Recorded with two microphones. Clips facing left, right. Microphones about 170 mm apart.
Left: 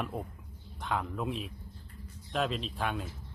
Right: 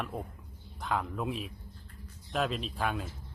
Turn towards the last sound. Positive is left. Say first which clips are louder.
# right 1 dB
turn(degrees=0)  # may be behind; listen again after turning